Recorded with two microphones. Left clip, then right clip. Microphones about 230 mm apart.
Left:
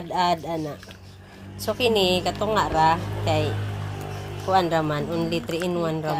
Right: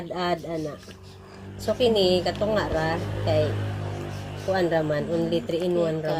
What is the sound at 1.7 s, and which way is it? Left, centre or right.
Speech, left.